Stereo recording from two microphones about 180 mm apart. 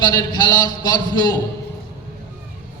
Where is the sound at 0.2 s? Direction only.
25° left (ahead or behind).